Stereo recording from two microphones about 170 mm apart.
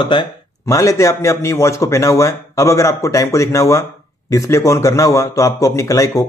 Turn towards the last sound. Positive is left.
turn(degrees=20)  # may be behind; listen again after turning